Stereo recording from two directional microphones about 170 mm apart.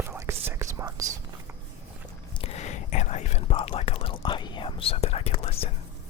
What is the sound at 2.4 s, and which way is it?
Whispering, 40° left (ahead or behind).